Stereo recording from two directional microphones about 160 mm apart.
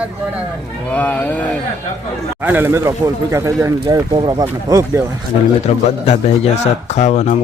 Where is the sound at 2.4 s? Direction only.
10° right (ahead or behind).